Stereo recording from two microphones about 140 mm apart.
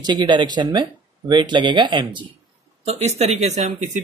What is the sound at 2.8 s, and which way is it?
Speech, 50° right (ahead or behind).